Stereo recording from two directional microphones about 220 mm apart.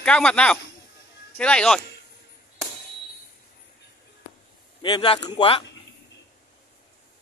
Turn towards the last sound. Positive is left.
turn(degrees=25)  # may be behind; listen again after turning